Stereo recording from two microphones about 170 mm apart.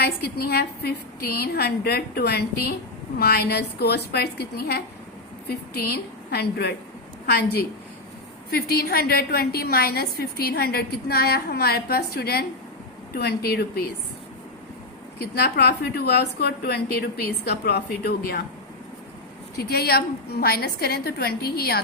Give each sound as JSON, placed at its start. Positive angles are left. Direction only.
{"t": 0.0, "sound": "a woman's voice", "side_deg": 70}
{"t": 15.2, "sound": "a woman's voice", "side_deg": 70}
{"t": 19.5, "sound": "a woman's voice", "side_deg": 70}